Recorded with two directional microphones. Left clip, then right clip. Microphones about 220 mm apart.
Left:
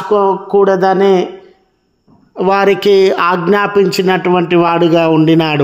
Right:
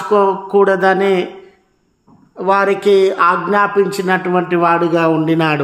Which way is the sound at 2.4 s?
40° left (ahead or behind).